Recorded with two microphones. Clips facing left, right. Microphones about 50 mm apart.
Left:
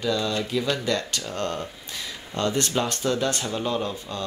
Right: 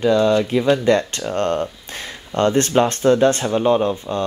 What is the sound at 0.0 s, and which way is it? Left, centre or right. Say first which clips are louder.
Speech: right 10 dB; right.